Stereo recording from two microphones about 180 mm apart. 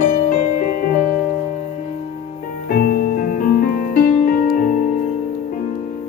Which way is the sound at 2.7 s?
55° left (ahead or behind).